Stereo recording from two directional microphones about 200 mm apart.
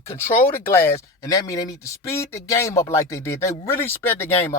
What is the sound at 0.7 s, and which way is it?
Speech, 10° left (ahead or behind).